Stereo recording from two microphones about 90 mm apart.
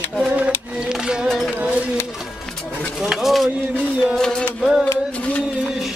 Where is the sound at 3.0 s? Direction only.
5° right (ahead or behind).